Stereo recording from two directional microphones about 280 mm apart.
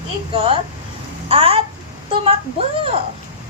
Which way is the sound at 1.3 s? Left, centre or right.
Right.